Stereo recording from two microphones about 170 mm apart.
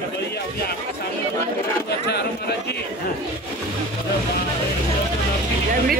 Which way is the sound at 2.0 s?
75° left (ahead or behind).